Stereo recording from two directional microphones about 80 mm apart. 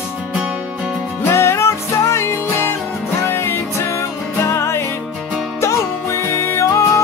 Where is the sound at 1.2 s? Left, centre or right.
Left.